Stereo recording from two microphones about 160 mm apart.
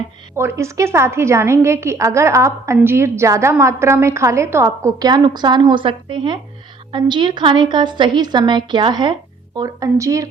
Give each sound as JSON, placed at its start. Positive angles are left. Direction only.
{"t": 0.3, "sound": "a woman's voice", "side_deg": -15}